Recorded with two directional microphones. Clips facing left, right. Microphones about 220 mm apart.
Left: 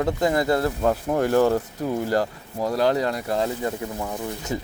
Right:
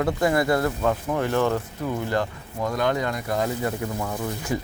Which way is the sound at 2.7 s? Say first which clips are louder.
Left 3 dB; 35° left (ahead or behind).